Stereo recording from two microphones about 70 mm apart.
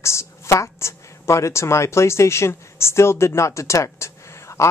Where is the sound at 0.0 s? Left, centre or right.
Left.